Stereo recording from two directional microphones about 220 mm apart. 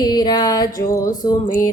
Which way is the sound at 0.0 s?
15° left (ahead or behind).